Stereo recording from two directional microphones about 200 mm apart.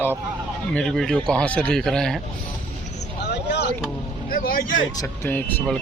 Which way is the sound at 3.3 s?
55° left (ahead or behind).